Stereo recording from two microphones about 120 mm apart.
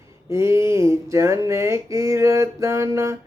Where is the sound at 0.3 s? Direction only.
25° right (ahead or behind).